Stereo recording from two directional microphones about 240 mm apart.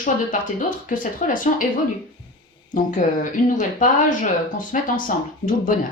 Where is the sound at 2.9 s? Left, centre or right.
Left.